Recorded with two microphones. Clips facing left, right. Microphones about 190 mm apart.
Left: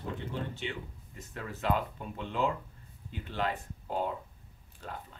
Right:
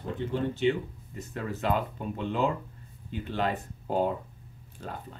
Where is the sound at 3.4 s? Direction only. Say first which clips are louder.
Right 3 dB; 35° right (ahead or behind).